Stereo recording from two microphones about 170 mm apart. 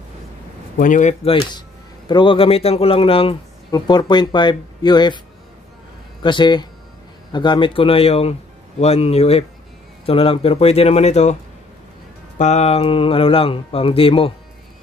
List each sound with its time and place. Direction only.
0.7 s speech: 50° left (ahead or behind)
1.2 s speech: 30° left (ahead or behind)
6.2 s speech: 25° left (ahead or behind)
12.4 s speech: 40° left (ahead or behind)